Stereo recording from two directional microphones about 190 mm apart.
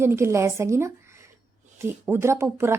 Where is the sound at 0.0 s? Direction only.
15° right (ahead or behind).